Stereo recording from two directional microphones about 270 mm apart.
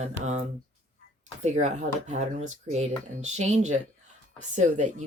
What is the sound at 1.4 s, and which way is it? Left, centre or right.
Speech, right.